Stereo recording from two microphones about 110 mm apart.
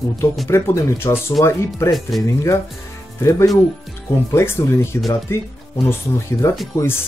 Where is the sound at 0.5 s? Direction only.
25° left (ahead or behind).